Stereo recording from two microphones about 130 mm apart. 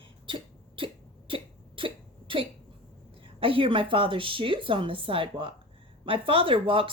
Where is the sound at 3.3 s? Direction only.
45° right (ahead or behind).